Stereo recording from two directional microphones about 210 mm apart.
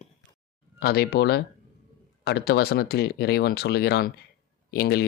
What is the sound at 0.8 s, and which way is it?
Speech, 45° left (ahead or behind).